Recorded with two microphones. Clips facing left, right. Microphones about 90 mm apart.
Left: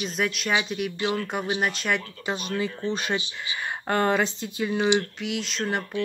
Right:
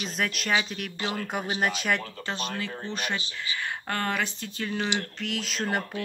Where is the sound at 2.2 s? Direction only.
20° left (ahead or behind).